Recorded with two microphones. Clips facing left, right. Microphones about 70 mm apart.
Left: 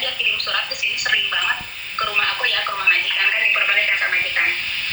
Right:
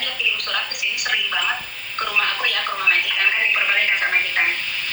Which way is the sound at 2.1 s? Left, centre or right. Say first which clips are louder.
Right 1 dB; left.